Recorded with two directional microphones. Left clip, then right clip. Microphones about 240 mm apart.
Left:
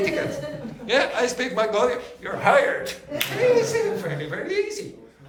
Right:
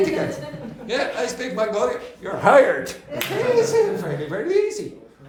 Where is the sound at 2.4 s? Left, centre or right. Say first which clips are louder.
Right 4 dB; centre.